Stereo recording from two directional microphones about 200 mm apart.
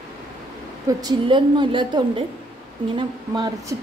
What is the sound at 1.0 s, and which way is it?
A woman's voice, 25° right (ahead or behind).